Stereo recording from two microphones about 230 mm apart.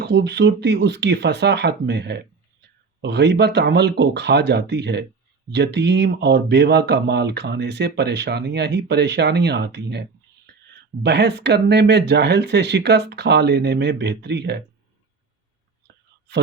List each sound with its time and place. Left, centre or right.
0.0 s speech: right
11.0 s speech: right